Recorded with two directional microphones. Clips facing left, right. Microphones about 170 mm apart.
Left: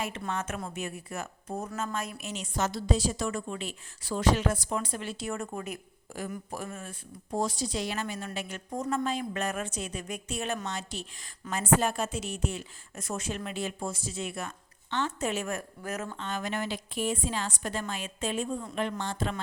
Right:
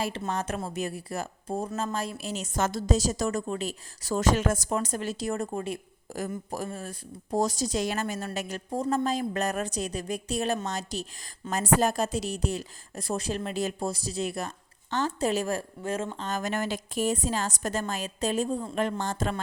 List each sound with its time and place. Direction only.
0.0 s a woman's voice: 35° right (ahead or behind)
16.2 s a woman's voice: 45° right (ahead or behind)